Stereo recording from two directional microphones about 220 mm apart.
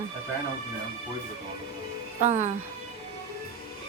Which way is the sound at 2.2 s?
30° right (ahead or behind).